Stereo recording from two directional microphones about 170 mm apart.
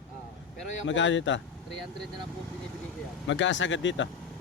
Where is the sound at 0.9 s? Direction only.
90° left.